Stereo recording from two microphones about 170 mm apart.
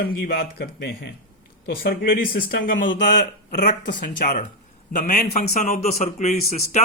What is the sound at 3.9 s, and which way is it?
Speech, 50° left (ahead or behind).